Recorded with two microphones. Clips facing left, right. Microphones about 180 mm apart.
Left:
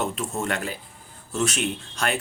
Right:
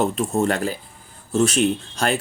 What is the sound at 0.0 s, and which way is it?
Speech, 35° right (ahead or behind).